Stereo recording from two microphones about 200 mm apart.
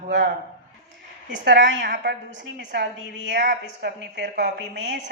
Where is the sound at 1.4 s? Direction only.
60° right (ahead or behind).